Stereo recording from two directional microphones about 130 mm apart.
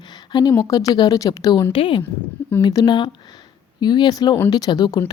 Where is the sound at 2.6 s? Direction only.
30° left (ahead or behind).